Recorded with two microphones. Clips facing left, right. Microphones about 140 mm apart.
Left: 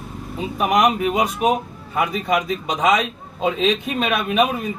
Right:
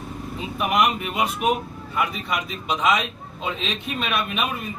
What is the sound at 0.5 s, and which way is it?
Speech, 40° left (ahead or behind).